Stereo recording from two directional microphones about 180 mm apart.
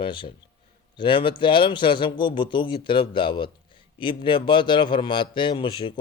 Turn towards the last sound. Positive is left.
turn(degrees=25)  # may be behind; listen again after turning